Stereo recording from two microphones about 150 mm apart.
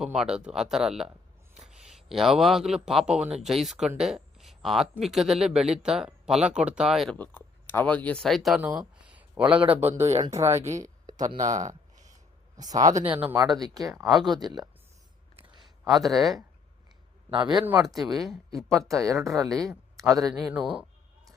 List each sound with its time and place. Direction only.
0.0 s speech: 5° right (ahead or behind)
7.2 s speech: 15° left (ahead or behind)
8.6 s a sound: 10° right (ahead or behind)
9.8 s a man's voice: 15° right (ahead or behind)
11.3 s speech: 55° right (ahead or behind)
11.7 s a sound: 25° right (ahead or behind)
12.5 s speech: 25° right (ahead or behind)
13.1 s a man's voice: 15° right (ahead or behind)
13.6 s speech: 25° right (ahead or behind)
16.0 s speech: centre (ahead or behind)
17.3 s speech: 30° right (ahead or behind)
18.1 s speech: centre (ahead or behind)
18.7 s speech: 20° right (ahead or behind)
20.3 s a man's voice: 5° right (ahead or behind)